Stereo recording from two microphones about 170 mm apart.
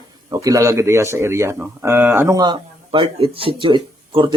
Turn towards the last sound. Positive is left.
turn(degrees=-25)  # may be behind; listen again after turning